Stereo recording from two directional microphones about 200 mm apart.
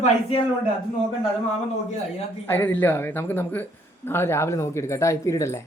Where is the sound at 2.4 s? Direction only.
10° left (ahead or behind).